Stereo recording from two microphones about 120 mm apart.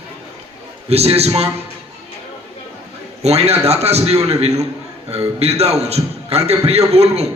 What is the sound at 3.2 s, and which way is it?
A man's voice, 60° right (ahead or behind).